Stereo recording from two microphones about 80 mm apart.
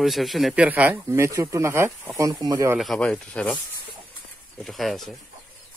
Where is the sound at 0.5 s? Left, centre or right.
Centre.